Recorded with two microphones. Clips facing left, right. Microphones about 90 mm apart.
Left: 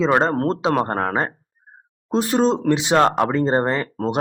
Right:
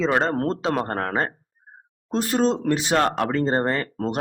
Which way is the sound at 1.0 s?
20° left (ahead or behind).